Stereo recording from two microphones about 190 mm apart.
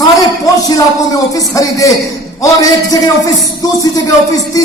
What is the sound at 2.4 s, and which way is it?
Speech, 20° left (ahead or behind).